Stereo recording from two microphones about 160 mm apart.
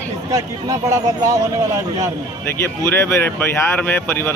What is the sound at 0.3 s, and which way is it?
Speech, 20° right (ahead or behind).